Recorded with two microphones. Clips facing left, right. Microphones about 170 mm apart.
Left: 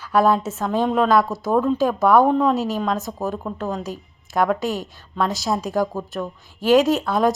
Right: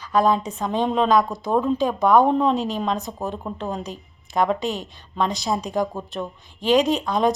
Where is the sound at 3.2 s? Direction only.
20° right (ahead or behind).